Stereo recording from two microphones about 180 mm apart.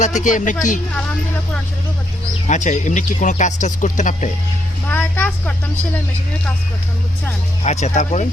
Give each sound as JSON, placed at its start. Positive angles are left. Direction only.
{"t": 0.0, "sound": "speech", "side_deg": 45}
{"t": 2.5, "sound": "speech", "side_deg": 45}
{"t": 4.9, "sound": "a sound", "side_deg": 10}
{"t": 7.6, "sound": "speech", "side_deg": 40}